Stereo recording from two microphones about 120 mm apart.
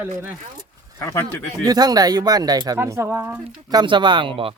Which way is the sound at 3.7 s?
35° right (ahead or behind).